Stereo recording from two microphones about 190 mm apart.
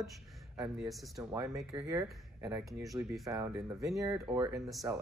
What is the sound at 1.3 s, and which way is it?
Speech, 15° right (ahead or behind).